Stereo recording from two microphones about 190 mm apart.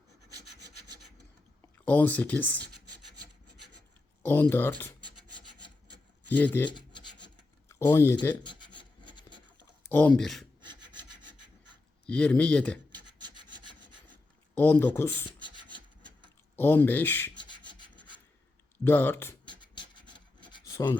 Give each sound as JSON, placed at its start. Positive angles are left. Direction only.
{"t": 0.3, "sound": "rub", "side_deg": -20}
{"t": 1.8, "sound": "speech", "side_deg": 10}
{"t": 4.2, "sound": "speech", "side_deg": 10}
{"t": 6.2, "sound": "speech", "side_deg": 10}
{"t": 6.7, "sound": "rub", "side_deg": 25}
{"t": 7.7, "sound": "speech", "side_deg": 15}
{"t": 8.4, "sound": "filing", "side_deg": 25}
{"t": 9.9, "sound": "speech", "side_deg": 10}
{"t": 12.0, "sound": "speech", "side_deg": 5}
{"t": 12.9, "sound": "rub", "side_deg": -25}
{"t": 14.5, "sound": "speech", "side_deg": 10}
{"t": 16.6, "sound": "speech", "side_deg": 10}
{"t": 18.9, "sound": "speech", "side_deg": 10}
{"t": 19.5, "sound": "filing", "side_deg": 25}